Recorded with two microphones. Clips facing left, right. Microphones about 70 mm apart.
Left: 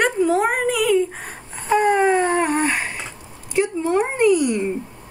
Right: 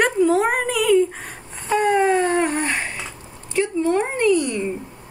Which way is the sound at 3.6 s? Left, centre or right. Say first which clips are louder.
Even; centre.